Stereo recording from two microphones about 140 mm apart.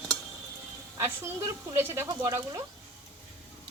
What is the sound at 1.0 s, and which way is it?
Speech, 15° right (ahead or behind).